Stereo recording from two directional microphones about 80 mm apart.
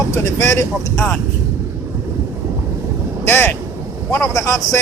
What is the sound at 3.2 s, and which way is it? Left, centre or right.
Speech, left.